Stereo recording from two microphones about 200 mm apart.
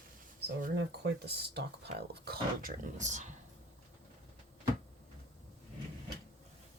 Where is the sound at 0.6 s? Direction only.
50° right (ahead or behind).